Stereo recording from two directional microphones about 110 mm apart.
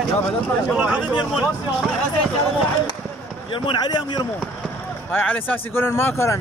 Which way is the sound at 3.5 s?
45° left (ahead or behind).